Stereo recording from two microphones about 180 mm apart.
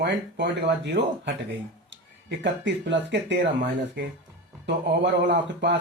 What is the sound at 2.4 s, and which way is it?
Speech, 80° right.